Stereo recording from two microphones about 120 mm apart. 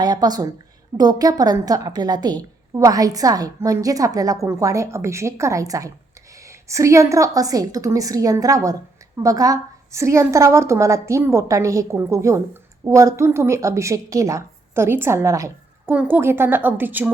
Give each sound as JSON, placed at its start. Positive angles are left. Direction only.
{"t": 0.0, "sound": "a woman's voice", "side_deg": -35}
{"t": 16.0, "sound": "a woman's voice", "side_deg": -15}